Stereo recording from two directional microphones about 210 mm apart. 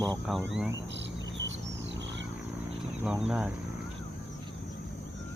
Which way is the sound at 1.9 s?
60° right (ahead or behind).